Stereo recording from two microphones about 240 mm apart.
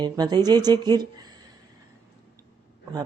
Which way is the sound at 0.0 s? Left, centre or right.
Centre.